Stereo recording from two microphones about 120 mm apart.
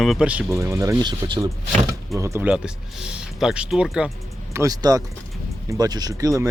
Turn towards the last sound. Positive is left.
turn(degrees=-30)  # may be behind; listen again after turning